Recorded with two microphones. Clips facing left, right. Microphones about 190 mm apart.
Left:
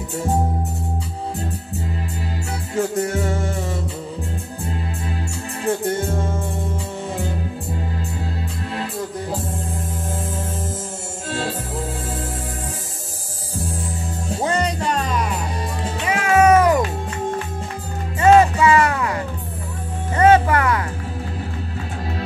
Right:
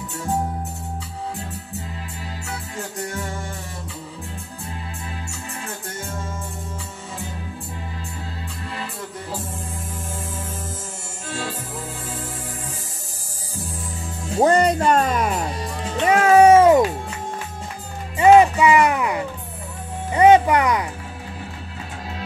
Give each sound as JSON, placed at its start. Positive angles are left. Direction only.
{"t": 2.7, "sound": "music", "side_deg": 70}
{"t": 6.1, "sound": "music", "side_deg": 65}
{"t": 14.4, "sound": "music", "side_deg": -50}
{"t": 16.1, "sound": "music", "side_deg": -40}
{"t": 18.1, "sound": "music", "side_deg": -15}